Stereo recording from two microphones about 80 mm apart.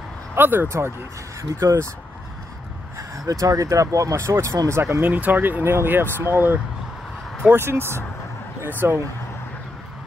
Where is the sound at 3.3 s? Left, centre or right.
Right.